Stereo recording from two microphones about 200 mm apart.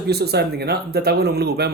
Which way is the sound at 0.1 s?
55° right (ahead or behind).